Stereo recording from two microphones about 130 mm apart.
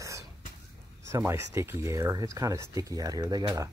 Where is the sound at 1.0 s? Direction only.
20° right (ahead or behind).